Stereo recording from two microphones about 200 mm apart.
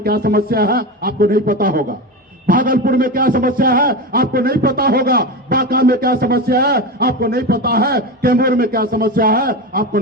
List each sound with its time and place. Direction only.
0.0 s a man's voice: 50° right (ahead or behind)